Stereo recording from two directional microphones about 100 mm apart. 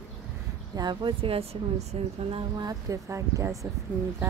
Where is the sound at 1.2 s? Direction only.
70° right (ahead or behind).